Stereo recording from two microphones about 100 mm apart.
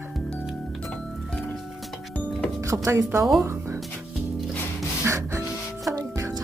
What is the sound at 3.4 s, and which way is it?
Music, 30° right (ahead or behind).